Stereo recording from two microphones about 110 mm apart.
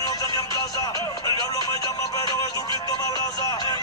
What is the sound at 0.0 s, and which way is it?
Music, 35° left (ahead or behind).